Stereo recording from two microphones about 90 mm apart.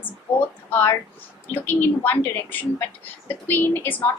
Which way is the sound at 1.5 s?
20° left (ahead or behind).